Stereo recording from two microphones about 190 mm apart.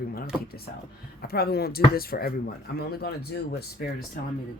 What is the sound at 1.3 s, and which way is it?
Speech, 55° left (ahead or behind).